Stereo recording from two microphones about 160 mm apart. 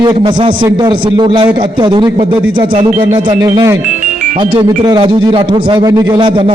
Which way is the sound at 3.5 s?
20° right (ahead or behind).